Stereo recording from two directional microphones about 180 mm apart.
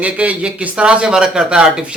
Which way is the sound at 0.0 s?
5° right (ahead or behind).